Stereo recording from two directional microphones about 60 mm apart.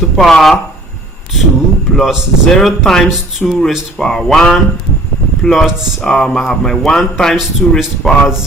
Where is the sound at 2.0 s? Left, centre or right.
Centre.